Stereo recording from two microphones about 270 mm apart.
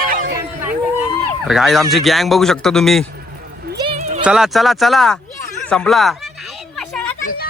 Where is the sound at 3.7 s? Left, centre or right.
Right.